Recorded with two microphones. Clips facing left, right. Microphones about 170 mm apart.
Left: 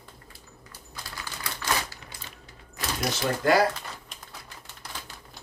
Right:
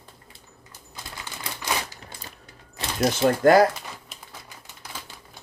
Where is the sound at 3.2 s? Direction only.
50° right (ahead or behind).